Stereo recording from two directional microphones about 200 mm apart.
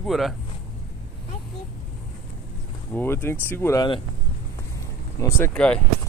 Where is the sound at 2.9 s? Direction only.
10° left (ahead or behind).